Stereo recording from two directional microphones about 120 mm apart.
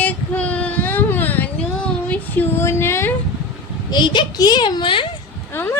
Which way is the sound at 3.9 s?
40° left (ahead or behind).